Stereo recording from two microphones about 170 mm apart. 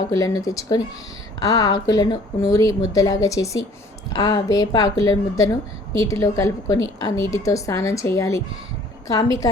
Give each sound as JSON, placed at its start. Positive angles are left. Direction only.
{"t": 0.2, "sound": "a woman's voice", "side_deg": 20}